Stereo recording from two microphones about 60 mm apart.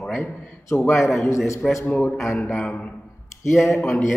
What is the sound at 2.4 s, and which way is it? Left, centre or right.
Speech, centre.